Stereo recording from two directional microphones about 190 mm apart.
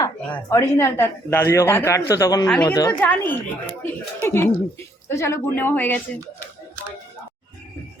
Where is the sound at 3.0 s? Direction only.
10° left (ahead or behind).